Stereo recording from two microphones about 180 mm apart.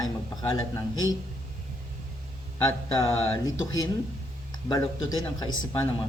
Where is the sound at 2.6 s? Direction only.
20° left (ahead or behind).